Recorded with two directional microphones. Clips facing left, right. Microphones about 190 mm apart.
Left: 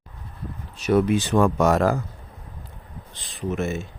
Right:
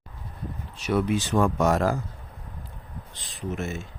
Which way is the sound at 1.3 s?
75° left (ahead or behind).